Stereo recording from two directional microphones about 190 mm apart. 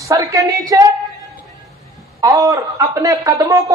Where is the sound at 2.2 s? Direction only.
15° right (ahead or behind).